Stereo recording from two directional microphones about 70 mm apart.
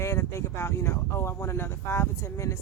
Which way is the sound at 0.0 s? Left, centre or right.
Left.